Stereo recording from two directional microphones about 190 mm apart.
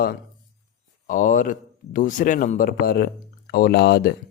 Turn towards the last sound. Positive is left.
turn(degrees=55)  # may be behind; listen again after turning